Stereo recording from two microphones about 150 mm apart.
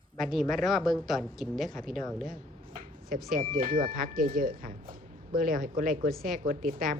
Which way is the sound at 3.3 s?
65° right (ahead or behind).